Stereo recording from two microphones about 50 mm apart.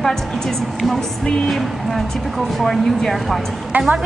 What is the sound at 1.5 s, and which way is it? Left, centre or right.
A woman's voice, centre.